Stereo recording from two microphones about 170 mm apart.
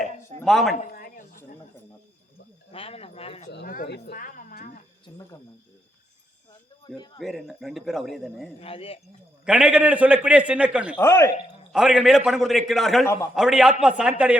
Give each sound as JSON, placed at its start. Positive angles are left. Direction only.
{"t": 0.4, "sound": "a man's voice", "side_deg": 0}
{"t": 0.8, "sound": "a sound", "side_deg": 50}
{"t": 2.7, "sound": "speech", "side_deg": 35}
{"t": 3.8, "sound": "speech", "side_deg": 75}
{"t": 5.1, "sound": "speech", "side_deg": 30}
{"t": 7.2, "sound": "a man's voice", "side_deg": 0}
{"t": 8.6, "sound": "speech", "side_deg": 35}
{"t": 9.5, "sound": "a man's voice", "side_deg": -5}
{"t": 10.9, "sound": "speech", "side_deg": 15}
{"t": 11.7, "sound": "a man's voice", "side_deg": -5}